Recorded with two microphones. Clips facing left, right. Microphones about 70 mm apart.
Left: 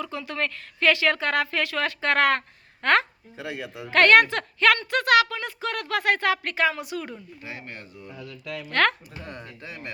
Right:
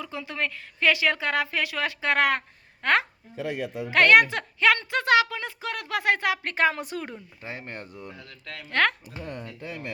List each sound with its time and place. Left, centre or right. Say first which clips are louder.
0.0 s a woman's voice: left 2 dB; centre
6.4 s speech: even; right
8.7 s speech: left 1 dB; right